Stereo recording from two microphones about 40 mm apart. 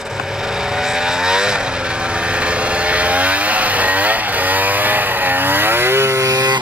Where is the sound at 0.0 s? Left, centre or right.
Centre; by 6.1 s right.